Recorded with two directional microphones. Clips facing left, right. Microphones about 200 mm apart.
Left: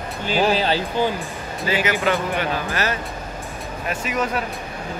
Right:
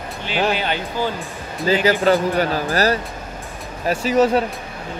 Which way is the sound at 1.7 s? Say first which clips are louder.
Right 5 dB; 30° right (ahead or behind).